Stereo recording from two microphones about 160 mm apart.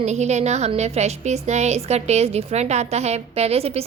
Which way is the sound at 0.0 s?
45° right (ahead or behind).